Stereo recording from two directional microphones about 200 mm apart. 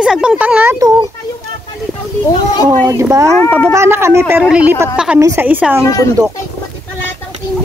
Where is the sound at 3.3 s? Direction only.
10° left (ahead or behind).